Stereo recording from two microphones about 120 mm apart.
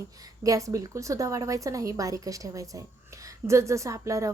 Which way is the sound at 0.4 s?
30° right (ahead or behind).